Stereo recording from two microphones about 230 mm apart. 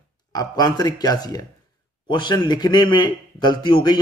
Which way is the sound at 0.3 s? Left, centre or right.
Centre.